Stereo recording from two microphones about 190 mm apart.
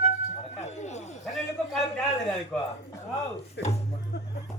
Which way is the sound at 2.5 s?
5° left (ahead or behind).